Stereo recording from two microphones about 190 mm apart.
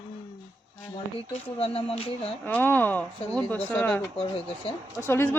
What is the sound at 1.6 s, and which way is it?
Speech, 30° left (ahead or behind).